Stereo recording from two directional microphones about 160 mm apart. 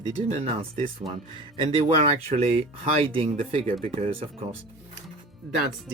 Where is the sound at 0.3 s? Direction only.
35° right (ahead or behind).